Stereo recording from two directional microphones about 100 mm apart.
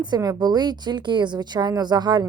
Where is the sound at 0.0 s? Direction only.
40° right (ahead or behind).